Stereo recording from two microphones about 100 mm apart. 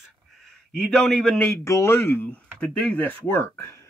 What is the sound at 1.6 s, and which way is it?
Speech, 30° left (ahead or behind).